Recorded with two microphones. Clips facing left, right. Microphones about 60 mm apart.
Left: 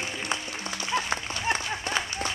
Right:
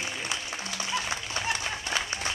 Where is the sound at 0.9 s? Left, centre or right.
Left.